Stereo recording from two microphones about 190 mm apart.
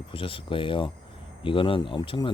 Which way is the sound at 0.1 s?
25° left (ahead or behind).